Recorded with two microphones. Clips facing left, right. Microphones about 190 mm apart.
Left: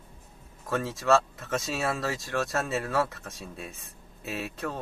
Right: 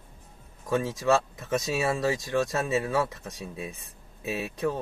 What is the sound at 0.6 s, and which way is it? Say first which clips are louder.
Speech: right 2 dB; 15° right (ahead or behind).